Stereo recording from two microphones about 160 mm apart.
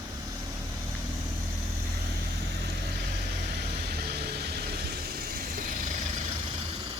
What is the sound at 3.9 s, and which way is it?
Vehicle, 80° right.